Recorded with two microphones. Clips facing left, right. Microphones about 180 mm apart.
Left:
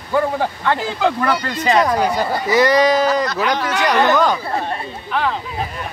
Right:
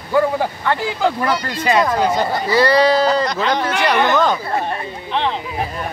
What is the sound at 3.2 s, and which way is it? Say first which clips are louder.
Speech: even; 20° right (ahead or behind).